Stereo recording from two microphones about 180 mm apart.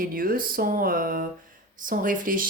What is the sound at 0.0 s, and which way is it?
Speech, 55° right (ahead or behind).